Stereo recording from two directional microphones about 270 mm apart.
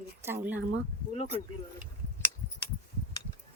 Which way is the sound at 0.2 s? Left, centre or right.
Centre.